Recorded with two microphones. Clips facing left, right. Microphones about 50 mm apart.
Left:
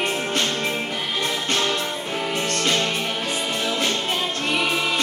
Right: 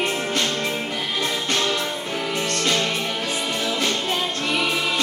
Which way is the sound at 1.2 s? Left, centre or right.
Left.